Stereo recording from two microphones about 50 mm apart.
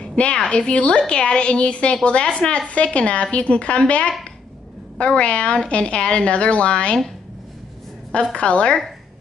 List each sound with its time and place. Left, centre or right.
0.0 s a woman's voice: left
8.1 s a woman's voice: left